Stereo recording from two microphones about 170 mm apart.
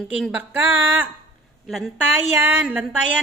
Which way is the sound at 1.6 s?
Centre (ahead or behind).